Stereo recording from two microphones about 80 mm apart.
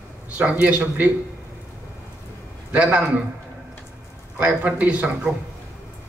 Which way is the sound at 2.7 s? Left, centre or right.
Centre.